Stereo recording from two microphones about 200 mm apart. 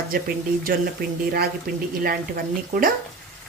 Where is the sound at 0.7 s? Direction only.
45° right (ahead or behind).